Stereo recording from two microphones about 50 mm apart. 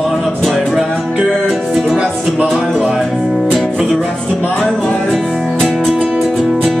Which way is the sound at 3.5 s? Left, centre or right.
Centre.